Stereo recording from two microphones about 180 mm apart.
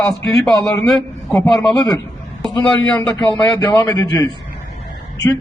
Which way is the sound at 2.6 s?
10° left (ahead or behind).